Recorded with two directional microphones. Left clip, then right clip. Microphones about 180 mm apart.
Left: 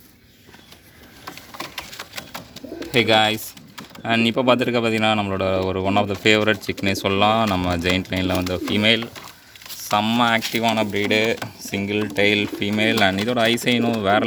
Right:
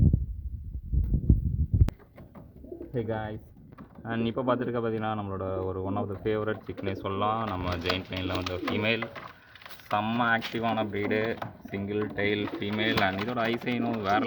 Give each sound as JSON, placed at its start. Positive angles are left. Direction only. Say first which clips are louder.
{"t": 2.9, "sound": "speech", "louder": "left 17 dB", "side_deg": 50}